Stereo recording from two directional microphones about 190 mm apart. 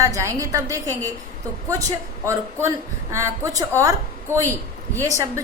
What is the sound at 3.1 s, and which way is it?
A woman's voice, 15° right (ahead or behind).